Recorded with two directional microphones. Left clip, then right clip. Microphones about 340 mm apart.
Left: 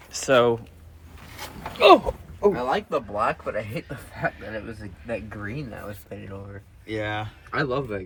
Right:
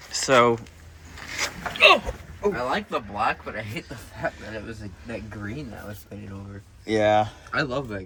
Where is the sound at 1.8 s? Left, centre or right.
Centre.